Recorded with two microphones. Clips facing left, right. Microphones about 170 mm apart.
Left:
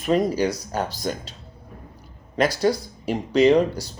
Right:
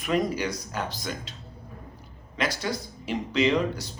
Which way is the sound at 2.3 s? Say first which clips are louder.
Left 9 dB; 35° left (ahead or behind).